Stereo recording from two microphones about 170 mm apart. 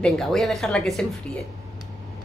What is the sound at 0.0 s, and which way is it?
Speech, 5° left (ahead or behind).